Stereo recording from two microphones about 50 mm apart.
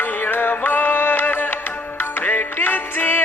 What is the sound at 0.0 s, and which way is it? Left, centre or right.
Music, left.